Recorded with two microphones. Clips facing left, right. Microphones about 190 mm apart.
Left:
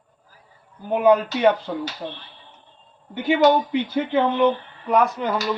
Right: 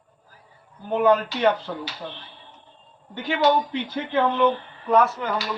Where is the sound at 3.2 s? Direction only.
10° left (ahead or behind).